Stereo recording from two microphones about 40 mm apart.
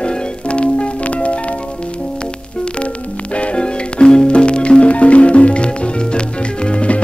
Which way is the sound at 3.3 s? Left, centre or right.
Left.